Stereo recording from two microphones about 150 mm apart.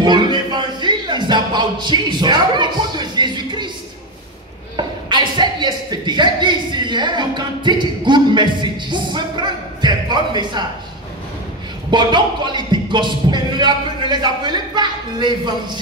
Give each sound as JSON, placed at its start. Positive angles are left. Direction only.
{"t": 0.0, "sound": "speech", "side_deg": -30}
{"t": 4.7, "sound": "speech", "side_deg": -30}
{"t": 11.9, "sound": "a sound", "side_deg": -30}